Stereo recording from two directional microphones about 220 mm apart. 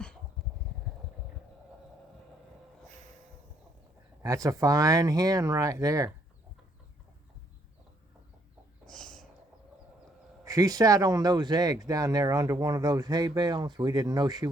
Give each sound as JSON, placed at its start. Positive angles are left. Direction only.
{"t": 4.2, "sound": "speech", "side_deg": -15}
{"t": 8.9, "sound": "a sound", "side_deg": 5}
{"t": 10.4, "sound": "speech", "side_deg": -15}